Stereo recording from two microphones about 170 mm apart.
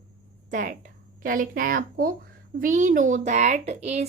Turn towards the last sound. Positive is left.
turn(degrees=-40)  # may be behind; listen again after turning